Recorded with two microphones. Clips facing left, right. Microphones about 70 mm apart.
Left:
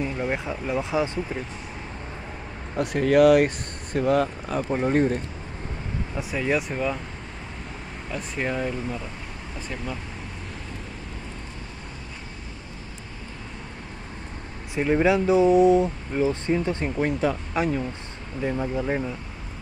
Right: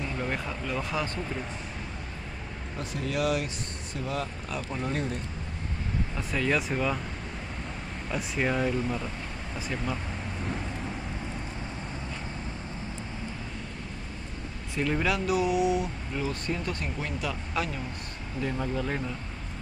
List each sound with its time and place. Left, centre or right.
0.2 s speech: centre
2.8 s speech: left
4.5 s speech: left
6.1 s speech: centre
8.1 s speech: centre
14.8 s speech: left
18.4 s speech: centre